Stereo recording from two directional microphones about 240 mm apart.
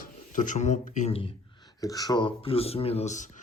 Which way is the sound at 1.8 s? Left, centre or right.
Centre.